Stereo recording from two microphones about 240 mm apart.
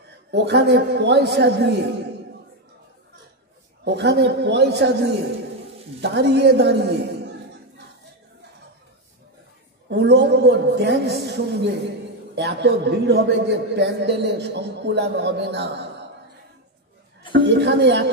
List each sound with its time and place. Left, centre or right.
0.3 s a man's voice: right
3.8 s a man's voice: right
9.8 s a man's voice: right
17.3 s a man's voice: right